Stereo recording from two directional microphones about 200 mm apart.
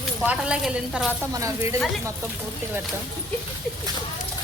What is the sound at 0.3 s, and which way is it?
Speech, 5° right (ahead or behind).